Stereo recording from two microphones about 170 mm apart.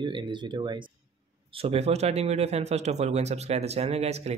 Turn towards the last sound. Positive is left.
turn(degrees=-40)  # may be behind; listen again after turning